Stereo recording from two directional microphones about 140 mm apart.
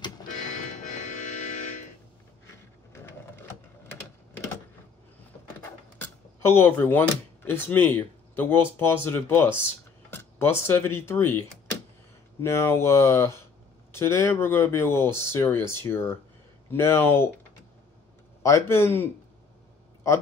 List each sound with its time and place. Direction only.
0.6 s music: 65° left (ahead or behind)
3.4 s typing: 15° left (ahead or behind)
5.6 s a sound: 15° left (ahead or behind)
8.4 s speech: 15° left (ahead or behind)
18.4 s speech: 20° left (ahead or behind)